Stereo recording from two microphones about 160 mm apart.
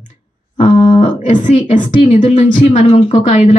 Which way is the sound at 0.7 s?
30° left (ahead or behind).